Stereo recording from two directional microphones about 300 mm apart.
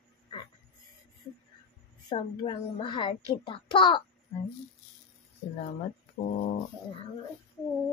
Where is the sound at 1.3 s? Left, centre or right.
Centre.